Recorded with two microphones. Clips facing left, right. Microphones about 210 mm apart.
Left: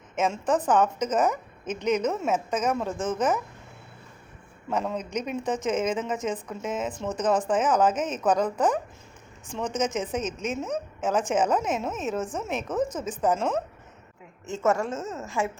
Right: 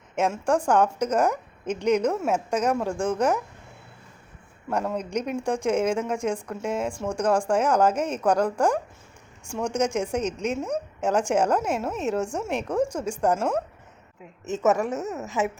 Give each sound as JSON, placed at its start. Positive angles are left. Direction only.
{"t": 0.2, "sound": "a woman's voice", "side_deg": -10}
{"t": 4.7, "sound": "a woman's voice", "side_deg": -10}